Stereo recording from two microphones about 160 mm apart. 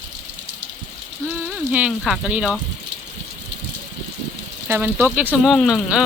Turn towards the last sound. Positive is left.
turn(degrees=0)  # may be behind; listen again after turning